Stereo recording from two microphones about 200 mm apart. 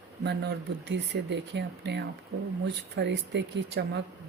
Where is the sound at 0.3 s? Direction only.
60° right (ahead or behind).